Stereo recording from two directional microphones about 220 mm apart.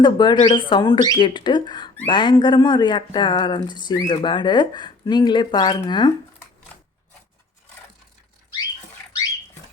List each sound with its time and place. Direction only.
0.0 s speech: 20° left (ahead or behind)